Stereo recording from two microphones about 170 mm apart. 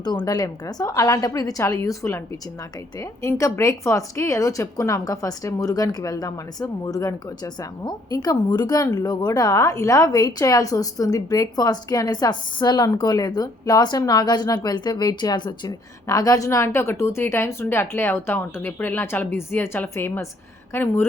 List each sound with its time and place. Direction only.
0.0 s speech: 25° left (ahead or behind)